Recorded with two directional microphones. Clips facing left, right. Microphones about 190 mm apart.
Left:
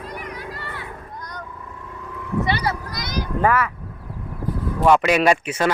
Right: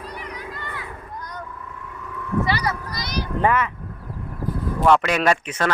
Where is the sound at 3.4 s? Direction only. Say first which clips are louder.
Left 1 dB; 20° right (ahead or behind).